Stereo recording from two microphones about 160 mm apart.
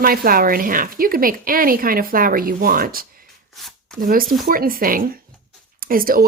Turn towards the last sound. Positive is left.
turn(degrees=-65)  # may be behind; listen again after turning